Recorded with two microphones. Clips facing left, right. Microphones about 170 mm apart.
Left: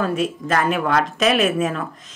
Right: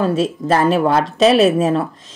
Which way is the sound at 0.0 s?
30° right (ahead or behind).